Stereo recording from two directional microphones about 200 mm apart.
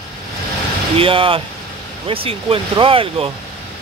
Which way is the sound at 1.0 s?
25° right (ahead or behind).